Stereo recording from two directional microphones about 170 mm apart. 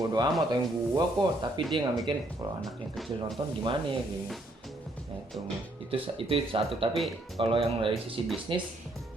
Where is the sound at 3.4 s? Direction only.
25° right (ahead or behind).